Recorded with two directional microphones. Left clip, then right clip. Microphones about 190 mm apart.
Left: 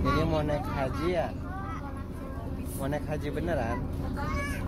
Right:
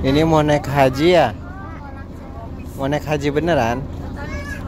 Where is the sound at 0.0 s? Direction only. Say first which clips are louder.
Right 13 dB; 35° right (ahead or behind).